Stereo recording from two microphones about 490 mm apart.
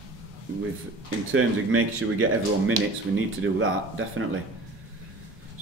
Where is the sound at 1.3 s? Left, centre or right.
Right.